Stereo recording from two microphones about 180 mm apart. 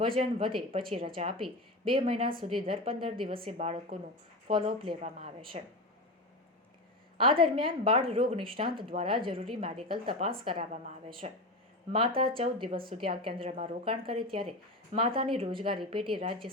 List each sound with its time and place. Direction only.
0.0 s a woman's voice: 30° right (ahead or behind)
7.2 s a woman's voice: 30° right (ahead or behind)